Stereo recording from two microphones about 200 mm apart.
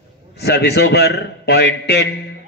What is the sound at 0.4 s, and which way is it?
A man's voice, 55° left (ahead or behind).